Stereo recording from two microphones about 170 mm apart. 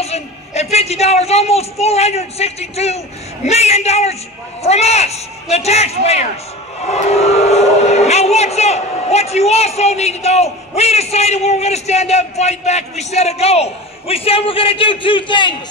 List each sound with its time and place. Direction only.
0.0 s speech: 40° left (ahead or behind)